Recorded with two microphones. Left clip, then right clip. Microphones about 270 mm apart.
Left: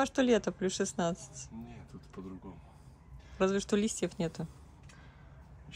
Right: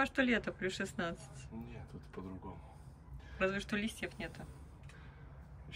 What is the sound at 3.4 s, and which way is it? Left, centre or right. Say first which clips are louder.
Speech: left 6 dB; centre.